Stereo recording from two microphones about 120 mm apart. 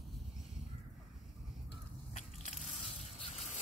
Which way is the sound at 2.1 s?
85° left.